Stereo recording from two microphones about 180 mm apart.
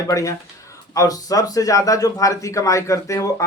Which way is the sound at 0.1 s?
20° left (ahead or behind).